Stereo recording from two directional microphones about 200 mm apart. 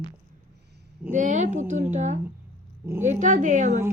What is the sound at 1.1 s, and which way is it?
Speech, 40° right (ahead or behind).